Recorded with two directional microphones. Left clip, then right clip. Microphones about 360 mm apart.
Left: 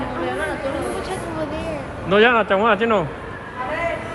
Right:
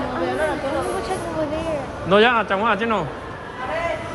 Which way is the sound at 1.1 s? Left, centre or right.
Right.